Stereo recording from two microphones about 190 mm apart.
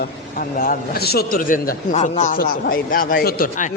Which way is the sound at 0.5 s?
45° left (ahead or behind).